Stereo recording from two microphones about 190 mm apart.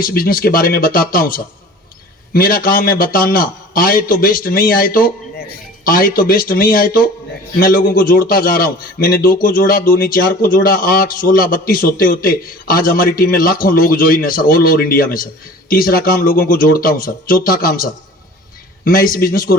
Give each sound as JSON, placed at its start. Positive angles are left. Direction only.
{"t": 0.0, "sound": "a man's voice", "side_deg": 50}